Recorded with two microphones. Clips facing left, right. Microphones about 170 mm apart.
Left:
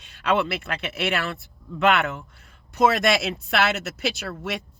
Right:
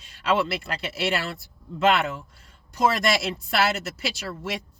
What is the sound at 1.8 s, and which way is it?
Speech, 60° left (ahead or behind).